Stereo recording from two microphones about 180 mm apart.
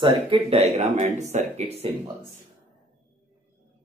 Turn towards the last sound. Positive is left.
turn(degrees=-35)  # may be behind; listen again after turning